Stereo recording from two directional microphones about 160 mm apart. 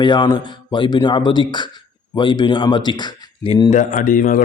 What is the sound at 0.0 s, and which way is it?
Speech, 30° left (ahead or behind).